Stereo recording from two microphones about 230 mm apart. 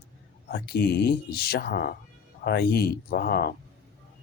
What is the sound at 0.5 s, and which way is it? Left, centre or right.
Speech, left.